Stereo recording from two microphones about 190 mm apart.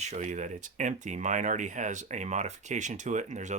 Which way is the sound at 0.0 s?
40° right (ahead or behind).